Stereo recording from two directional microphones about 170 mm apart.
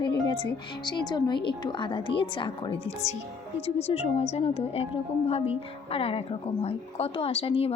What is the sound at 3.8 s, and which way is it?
A woman's voice, 35° left (ahead or behind).